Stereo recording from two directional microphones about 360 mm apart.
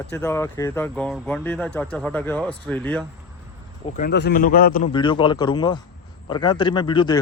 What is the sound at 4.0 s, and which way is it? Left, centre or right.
A man's voice, left.